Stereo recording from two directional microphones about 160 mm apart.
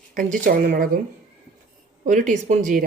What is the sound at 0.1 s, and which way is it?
Speech, 55° right (ahead or behind).